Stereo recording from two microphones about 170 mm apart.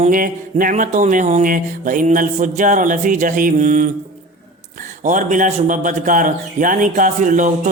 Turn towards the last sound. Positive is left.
turn(degrees=-50)  # may be behind; listen again after turning